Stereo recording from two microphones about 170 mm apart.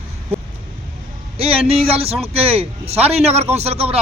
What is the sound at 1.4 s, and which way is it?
A man's voice, 35° right (ahead or behind).